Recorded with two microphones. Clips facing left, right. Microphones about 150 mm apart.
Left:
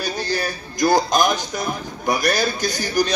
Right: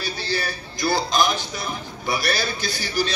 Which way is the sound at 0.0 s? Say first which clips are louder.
Left 4 dB; 45° left (ahead or behind).